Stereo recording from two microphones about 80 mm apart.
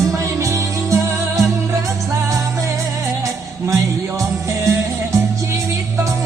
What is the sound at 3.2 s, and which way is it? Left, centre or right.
Music, right.